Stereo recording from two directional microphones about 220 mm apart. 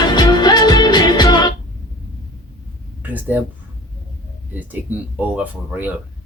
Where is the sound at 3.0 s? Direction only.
10° right (ahead or behind).